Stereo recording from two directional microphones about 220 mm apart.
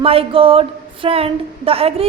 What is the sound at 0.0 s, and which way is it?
A woman's voice, 25° right (ahead or behind).